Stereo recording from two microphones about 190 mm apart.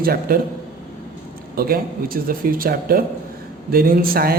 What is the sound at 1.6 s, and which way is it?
A man's voice, 50° right (ahead or behind).